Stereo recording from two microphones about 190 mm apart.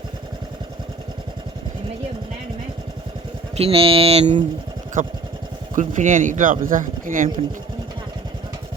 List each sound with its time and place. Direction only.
3.5 s speech: 30° right (ahead or behind)
5.0 s speech: 45° right (ahead or behind)